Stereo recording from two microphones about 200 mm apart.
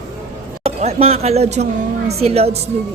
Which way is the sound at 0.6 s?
30° right (ahead or behind).